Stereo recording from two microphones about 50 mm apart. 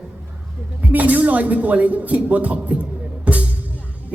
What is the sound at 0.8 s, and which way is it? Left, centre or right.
Speech, right.